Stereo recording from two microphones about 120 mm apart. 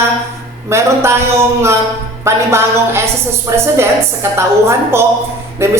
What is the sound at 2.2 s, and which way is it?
A woman's voice, 20° right (ahead or behind).